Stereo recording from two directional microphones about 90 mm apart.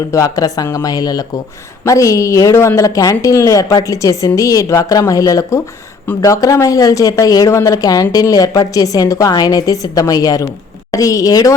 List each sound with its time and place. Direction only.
0.1 s a woman's voice: 40° left (ahead or behind)